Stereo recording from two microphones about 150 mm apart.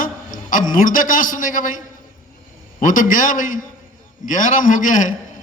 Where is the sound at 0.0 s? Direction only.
65° left (ahead or behind).